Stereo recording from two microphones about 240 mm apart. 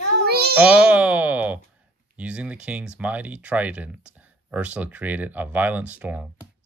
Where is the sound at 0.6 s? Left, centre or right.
Centre.